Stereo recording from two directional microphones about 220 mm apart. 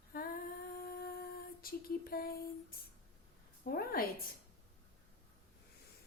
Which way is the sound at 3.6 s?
45° left (ahead or behind).